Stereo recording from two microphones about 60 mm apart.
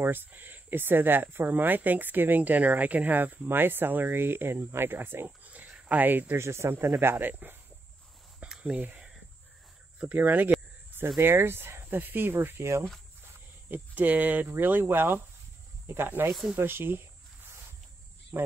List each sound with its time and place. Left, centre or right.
0.0 s speech: right
5.5 s a sound: right
6.3 s speech: right
8.4 s a sound: centre
8.7 s speech: right
10.1 s speech: right
13.2 s speech: right
16.3 s speech: centre
16.5 s speech: right
18.3 s speech: right